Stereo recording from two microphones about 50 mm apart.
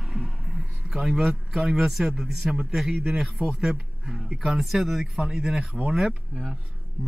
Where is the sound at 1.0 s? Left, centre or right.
Centre.